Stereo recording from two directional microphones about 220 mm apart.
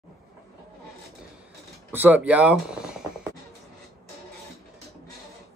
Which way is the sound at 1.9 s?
10° right (ahead or behind).